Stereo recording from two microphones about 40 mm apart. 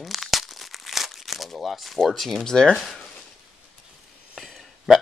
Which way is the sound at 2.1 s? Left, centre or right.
Centre.